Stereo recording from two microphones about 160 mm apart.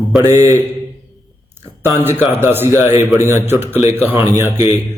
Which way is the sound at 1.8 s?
15° right (ahead or behind).